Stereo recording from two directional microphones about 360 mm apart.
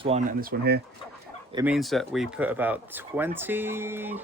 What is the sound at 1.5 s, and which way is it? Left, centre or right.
Speech, centre.